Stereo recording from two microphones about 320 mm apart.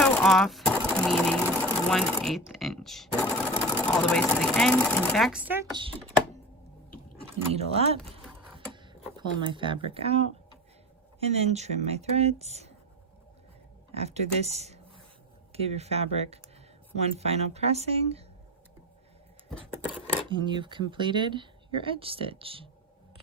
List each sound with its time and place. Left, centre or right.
0.0 s a sound: centre
0.9 s speech: centre
7.5 s speech: centre
8.4 s printer: centre
9.4 s speech: centre
13.9 s speech: centre
20.4 s speech: centre